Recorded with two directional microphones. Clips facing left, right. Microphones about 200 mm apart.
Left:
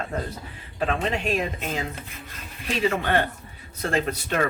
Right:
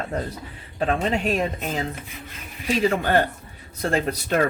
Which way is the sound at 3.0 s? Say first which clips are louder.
Right 3 dB; 40° right (ahead or behind).